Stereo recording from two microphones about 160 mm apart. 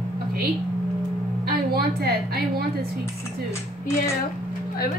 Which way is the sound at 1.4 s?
75° right (ahead or behind).